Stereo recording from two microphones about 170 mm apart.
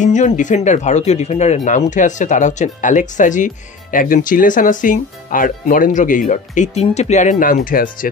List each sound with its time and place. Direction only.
0.0 s speech: 45° left (ahead or behind)